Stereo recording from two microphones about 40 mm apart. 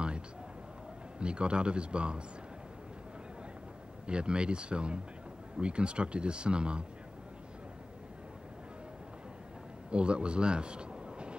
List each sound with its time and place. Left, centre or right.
1.2 s speech: right
4.1 s speech: right
9.8 s speech: right